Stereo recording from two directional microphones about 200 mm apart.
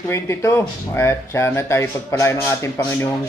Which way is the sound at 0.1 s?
15° left (ahead or behind).